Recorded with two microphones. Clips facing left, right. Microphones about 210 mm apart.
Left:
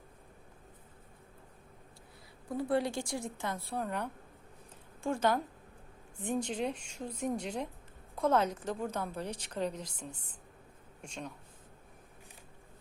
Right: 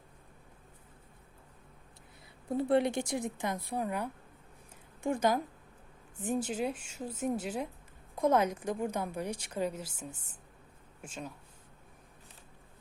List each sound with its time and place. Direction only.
2.5 s a woman's voice: 25° right (ahead or behind); by 11.3 s 5° right (ahead or behind)